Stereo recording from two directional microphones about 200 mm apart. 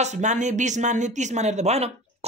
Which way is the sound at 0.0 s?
35° right (ahead or behind).